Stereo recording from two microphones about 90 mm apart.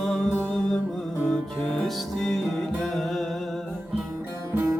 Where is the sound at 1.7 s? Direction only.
Centre (ahead or behind).